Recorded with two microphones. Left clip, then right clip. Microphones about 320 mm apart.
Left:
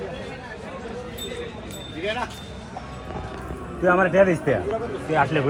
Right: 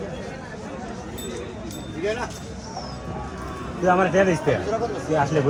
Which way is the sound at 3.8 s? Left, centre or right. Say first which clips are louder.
Left 1 dB; centre.